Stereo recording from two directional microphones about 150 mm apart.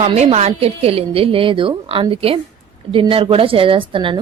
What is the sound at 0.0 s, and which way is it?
A woman's voice, 45° right (ahead or behind).